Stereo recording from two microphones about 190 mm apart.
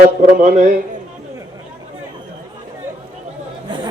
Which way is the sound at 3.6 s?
25° right (ahead or behind).